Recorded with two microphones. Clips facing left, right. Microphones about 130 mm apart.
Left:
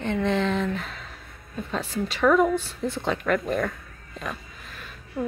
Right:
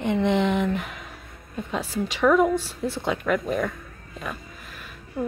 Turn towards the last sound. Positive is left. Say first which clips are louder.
# even
turn(degrees=-5)  # may be behind; listen again after turning